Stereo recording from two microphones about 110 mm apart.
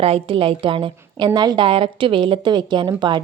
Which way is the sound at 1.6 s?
50° right (ahead or behind).